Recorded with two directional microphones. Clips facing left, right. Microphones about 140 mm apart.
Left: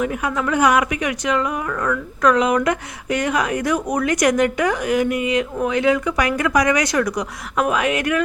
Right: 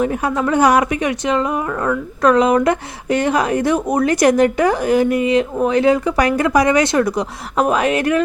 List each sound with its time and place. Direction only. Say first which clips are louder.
0.0 s speech: right 4 dB; 35° right (ahead or behind)